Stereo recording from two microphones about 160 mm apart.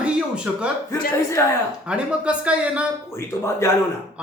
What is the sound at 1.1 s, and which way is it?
Speech, 15° left (ahead or behind).